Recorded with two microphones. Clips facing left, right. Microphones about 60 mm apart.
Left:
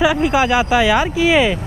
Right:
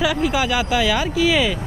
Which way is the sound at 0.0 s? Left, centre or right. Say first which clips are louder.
Left 5 dB; left.